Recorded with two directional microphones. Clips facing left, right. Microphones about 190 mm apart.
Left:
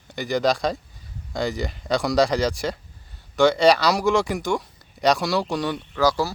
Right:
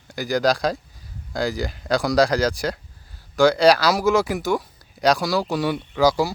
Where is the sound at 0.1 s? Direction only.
Centre (ahead or behind).